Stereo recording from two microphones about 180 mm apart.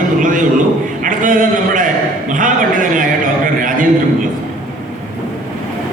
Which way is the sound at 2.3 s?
45° right (ahead or behind).